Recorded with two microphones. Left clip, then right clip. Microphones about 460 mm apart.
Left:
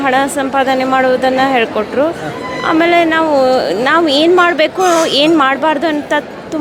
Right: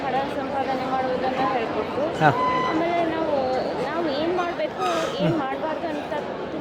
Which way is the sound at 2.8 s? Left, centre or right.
Left.